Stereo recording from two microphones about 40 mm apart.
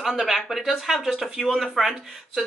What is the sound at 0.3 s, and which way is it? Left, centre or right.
Speech, centre.